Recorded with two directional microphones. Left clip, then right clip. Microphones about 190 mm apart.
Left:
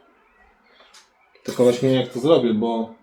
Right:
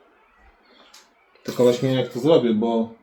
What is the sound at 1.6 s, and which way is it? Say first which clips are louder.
Speech: left 1 dB; 15° left (ahead or behind).